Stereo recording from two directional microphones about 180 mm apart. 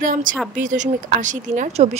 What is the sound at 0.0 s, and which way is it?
Speech, 50° right (ahead or behind).